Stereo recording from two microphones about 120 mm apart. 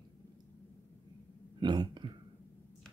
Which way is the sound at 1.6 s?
40° right (ahead or behind).